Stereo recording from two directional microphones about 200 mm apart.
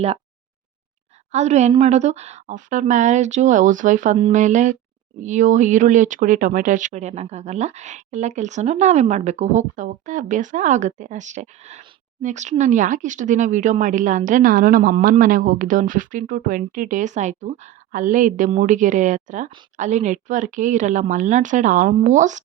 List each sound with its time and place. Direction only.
1.3 s speech: 35° right (ahead or behind)